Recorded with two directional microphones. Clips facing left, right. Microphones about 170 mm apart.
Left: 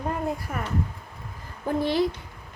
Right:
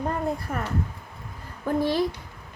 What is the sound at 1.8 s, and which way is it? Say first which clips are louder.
Speech: left 1 dB; 20° left (ahead or behind).